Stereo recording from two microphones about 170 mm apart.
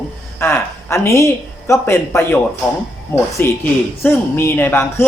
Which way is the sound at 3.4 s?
10° left (ahead or behind).